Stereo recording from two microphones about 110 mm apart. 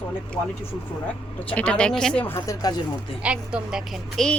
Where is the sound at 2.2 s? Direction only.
25° left (ahead or behind).